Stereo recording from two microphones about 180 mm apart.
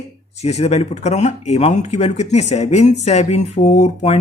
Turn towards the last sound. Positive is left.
turn(degrees=35)  # may be behind; listen again after turning